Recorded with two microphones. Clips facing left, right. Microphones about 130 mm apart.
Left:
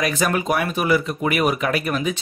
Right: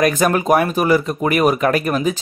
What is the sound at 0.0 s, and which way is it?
Speech, 45° right (ahead or behind).